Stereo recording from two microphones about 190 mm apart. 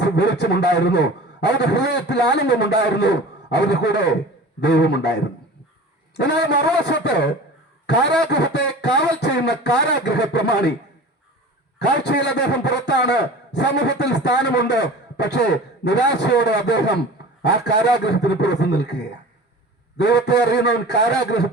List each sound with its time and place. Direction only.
0.0 s a man's voice: 65° left (ahead or behind)
6.1 s a man's voice: 60° left (ahead or behind)
8.3 s a man's voice: 60° left (ahead or behind)
11.8 s a man's voice: 60° left (ahead or behind)
20.0 s a man's voice: 60° left (ahead or behind)